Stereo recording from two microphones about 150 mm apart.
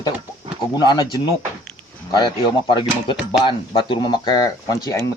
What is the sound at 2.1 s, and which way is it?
Speech, 30° left (ahead or behind).